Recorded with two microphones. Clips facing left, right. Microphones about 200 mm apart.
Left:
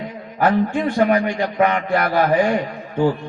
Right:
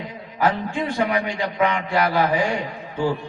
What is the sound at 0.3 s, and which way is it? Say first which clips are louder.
A man's voice: left 5 dB; 55° left (ahead or behind).